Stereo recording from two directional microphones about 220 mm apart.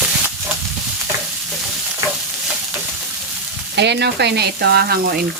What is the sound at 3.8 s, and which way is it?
Frying, 50° right (ahead or behind).